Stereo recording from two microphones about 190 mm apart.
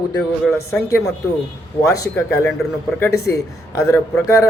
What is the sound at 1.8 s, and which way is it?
Speech, 15° left (ahead or behind).